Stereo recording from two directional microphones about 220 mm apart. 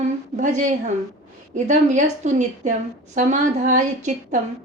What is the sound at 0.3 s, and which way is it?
A woman's voice, 35° right (ahead or behind).